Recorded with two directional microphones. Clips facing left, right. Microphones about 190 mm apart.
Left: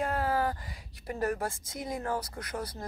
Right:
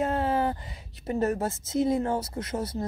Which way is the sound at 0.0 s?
25° right (ahead or behind).